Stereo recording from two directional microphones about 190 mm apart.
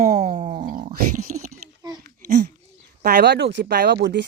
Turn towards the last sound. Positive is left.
turn(degrees=-65)  # may be behind; listen again after turning